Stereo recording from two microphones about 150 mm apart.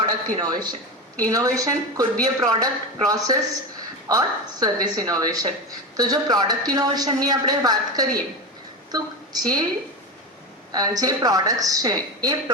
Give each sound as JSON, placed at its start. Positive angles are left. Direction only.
{"t": 0.0, "sound": "a woman's voice", "side_deg": -30}
{"t": 10.7, "sound": "a woman's voice", "side_deg": -25}